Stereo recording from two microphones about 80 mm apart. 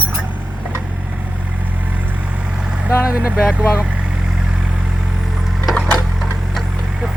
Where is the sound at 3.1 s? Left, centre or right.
Centre.